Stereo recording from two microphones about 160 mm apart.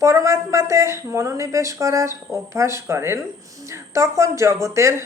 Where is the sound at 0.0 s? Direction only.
20° right (ahead or behind).